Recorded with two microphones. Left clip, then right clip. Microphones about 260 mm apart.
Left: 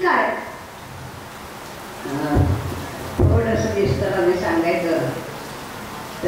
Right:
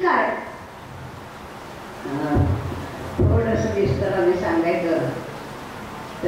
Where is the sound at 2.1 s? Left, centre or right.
Centre.